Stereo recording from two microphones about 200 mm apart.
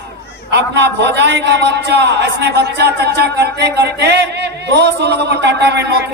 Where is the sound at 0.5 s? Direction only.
60° right (ahead or behind).